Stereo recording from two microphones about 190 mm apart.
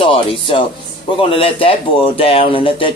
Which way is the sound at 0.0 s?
30° left (ahead or behind).